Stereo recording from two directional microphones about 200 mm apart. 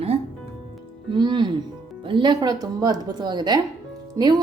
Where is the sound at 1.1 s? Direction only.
20° right (ahead or behind).